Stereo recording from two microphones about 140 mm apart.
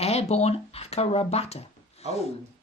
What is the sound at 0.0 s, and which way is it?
Speech, 50° left (ahead or behind).